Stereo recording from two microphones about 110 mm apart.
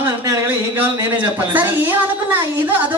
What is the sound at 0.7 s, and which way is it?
A woman's voice, 15° right (ahead or behind).